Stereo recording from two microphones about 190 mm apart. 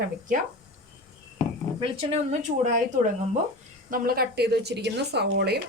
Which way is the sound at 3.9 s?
50° right (ahead or behind).